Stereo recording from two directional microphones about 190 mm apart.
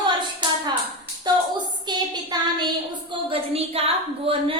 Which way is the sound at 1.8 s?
25° right (ahead or behind).